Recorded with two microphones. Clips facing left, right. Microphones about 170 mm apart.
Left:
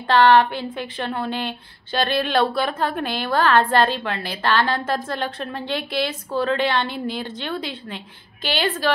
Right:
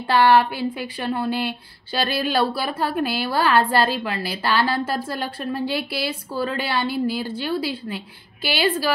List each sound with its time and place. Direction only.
0.2 s speech: 10° right (ahead or behind)